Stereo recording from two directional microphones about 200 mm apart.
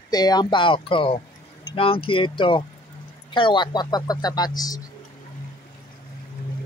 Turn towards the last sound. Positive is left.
turn(degrees=20)  # may be behind; listen again after turning